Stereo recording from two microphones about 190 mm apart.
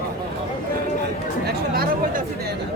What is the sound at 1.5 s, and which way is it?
Chatter, 55° right (ahead or behind).